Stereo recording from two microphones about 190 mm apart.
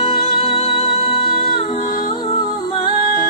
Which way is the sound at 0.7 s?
25° left (ahead or behind).